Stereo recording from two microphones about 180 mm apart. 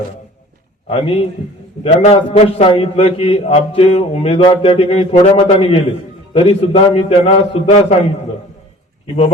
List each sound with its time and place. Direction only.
0.9 s a man's voice: 30° left (ahead or behind)